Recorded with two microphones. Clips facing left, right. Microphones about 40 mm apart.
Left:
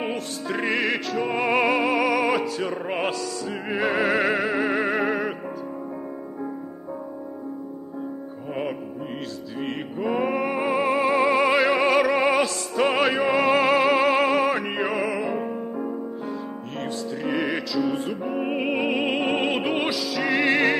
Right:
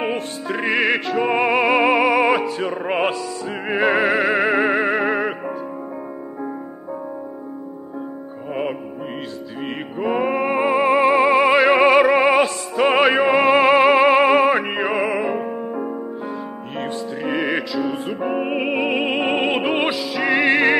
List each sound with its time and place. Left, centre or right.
0.5 s music: centre
0.8 s music: right
4.1 s music: centre
4.4 s music: right
4.7 s music: centre
9.9 s music: right
10.2 s music: centre
11.7 s music: right
17.2 s music: centre